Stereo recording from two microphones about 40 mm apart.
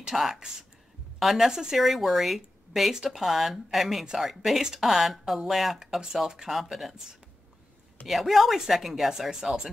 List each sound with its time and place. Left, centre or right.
0.1 s speech: centre
1.5 s speech: centre
1.8 s speech: centre
8.1 s speech: centre